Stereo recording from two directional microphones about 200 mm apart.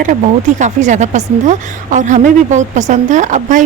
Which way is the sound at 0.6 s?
35° right (ahead or behind).